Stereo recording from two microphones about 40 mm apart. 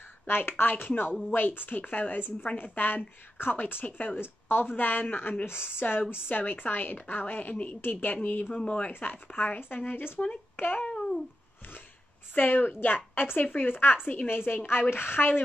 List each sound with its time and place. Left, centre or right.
0.3 s a woman's voice: left
3.8 s speech: left
4.2 s a woman's voice: left
8.5 s speech: left
8.8 s a woman's voice: left
10.5 s a sound: left
10.8 s babbling: centre
12.4 s a woman's voice: left